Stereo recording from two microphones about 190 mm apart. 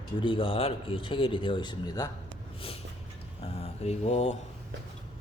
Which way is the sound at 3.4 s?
30° left (ahead or behind).